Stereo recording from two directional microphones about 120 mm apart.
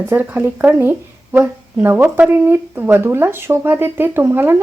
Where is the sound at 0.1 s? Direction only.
15° right (ahead or behind).